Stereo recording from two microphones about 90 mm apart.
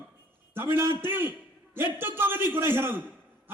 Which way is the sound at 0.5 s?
25° right (ahead or behind).